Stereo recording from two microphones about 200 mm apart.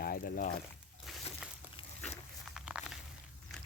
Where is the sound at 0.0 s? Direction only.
45° left (ahead or behind).